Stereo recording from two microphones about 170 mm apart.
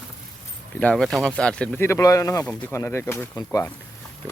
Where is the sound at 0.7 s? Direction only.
5° left (ahead or behind).